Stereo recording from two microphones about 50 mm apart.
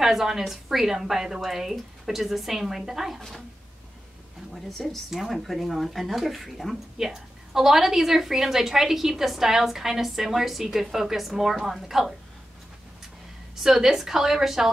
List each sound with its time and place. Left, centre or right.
0.0 s a woman's voice: centre
3.2 s speech: centre
4.6 s a woman's voice: centre
13.6 s a woman's voice: centre